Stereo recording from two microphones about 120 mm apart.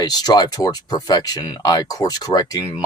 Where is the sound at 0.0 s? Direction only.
35° left (ahead or behind).